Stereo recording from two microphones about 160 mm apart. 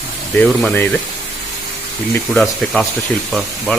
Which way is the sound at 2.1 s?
5° left (ahead or behind).